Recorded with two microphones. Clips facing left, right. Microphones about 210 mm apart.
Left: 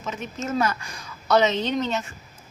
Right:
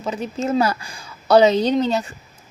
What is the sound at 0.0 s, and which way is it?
A woman's voice, 35° right (ahead or behind).